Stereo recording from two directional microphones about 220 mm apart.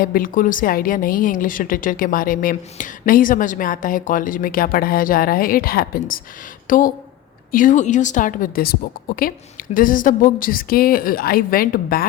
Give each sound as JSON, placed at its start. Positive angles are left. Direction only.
{"t": 0.0, "sound": "a woman's voice", "side_deg": 40}